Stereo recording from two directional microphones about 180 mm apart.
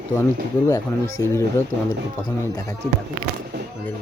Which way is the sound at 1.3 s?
15° left (ahead or behind).